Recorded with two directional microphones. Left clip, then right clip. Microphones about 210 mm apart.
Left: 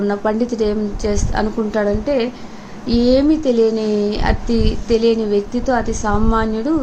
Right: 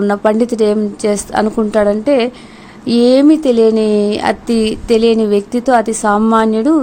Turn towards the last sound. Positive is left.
turn(degrees=-50)  # may be behind; listen again after turning